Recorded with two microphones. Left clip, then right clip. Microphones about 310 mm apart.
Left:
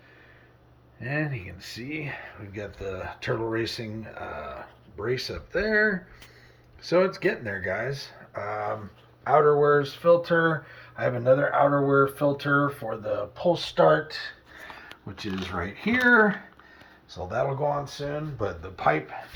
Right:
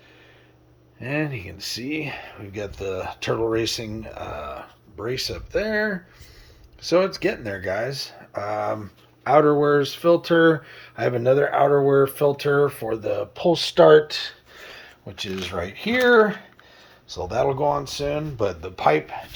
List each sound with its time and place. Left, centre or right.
0.9 s speech: right
6.9 s speech: right
14.8 s a sound: centre
15.4 s speech: centre
16.0 s speech: centre
17.1 s speech: right